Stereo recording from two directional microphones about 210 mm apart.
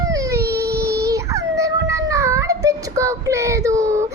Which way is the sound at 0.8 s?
15° right (ahead or behind).